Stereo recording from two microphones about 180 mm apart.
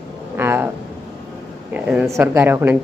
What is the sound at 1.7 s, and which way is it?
Speech, 10° right (ahead or behind).